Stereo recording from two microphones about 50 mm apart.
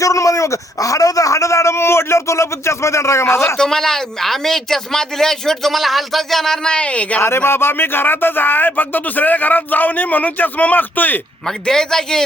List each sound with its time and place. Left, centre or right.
0.0 s speech: left
3.6 s speech: centre
6.7 s speech: left
7.2 s speech: left
11.4 s speech: centre